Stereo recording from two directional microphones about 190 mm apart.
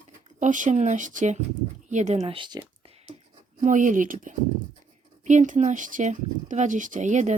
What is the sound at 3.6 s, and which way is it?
Speech, 40° right (ahead or behind).